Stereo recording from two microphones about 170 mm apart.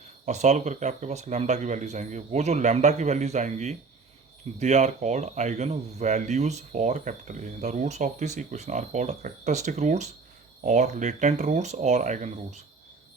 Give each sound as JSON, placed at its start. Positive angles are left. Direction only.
{"t": 0.3, "sound": "speech", "side_deg": -40}